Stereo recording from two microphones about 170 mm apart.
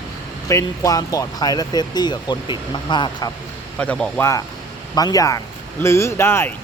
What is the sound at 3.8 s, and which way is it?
Speech, 5° left (ahead or behind).